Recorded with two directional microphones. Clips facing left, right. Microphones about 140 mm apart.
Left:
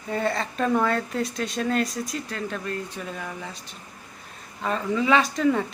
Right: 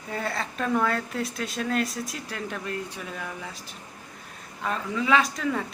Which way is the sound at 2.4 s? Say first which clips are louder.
Left 3 dB; 15° right (ahead or behind).